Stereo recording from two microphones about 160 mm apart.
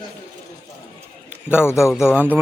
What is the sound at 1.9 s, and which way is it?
Speech, 5° right (ahead or behind).